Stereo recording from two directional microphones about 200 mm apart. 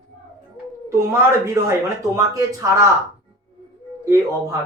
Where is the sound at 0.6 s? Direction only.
10° right (ahead or behind).